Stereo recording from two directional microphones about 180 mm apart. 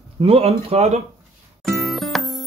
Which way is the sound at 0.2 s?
35° right (ahead or behind).